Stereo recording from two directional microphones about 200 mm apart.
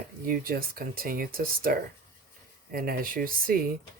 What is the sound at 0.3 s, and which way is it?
Speech, 45° right (ahead or behind).